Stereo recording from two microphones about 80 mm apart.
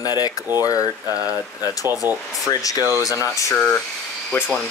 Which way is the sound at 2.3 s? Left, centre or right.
Left.